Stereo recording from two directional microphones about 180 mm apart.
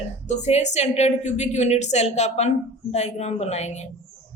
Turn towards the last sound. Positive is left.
turn(degrees=40)  # may be behind; listen again after turning